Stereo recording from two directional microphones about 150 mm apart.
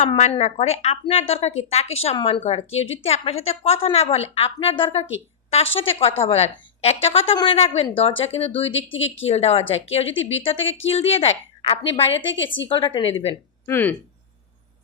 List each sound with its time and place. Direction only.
0.2 s a woman's voice: 50° left (ahead or behind)
13.7 s speech: 15° left (ahead or behind)